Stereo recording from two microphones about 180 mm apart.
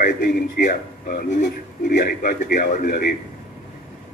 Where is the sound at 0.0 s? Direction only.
50° left (ahead or behind).